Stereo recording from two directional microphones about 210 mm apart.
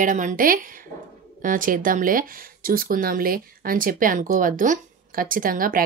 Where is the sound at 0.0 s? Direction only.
35° right (ahead or behind).